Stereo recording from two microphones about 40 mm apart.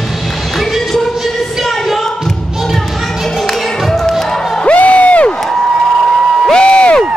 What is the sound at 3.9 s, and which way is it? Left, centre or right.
Music, centre.